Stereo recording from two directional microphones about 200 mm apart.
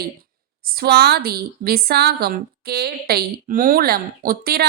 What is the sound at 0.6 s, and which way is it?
A woman's voice, 50° right (ahead or behind).